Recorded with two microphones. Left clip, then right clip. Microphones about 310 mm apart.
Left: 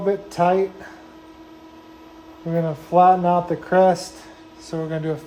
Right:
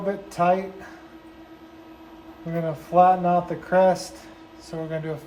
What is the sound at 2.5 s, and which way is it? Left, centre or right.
Speech, left.